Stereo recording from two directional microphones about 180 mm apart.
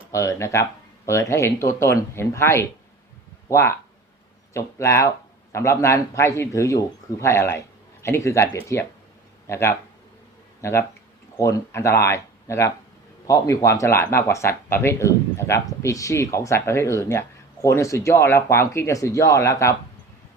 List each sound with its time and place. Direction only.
0.1 s speech: 20° left (ahead or behind)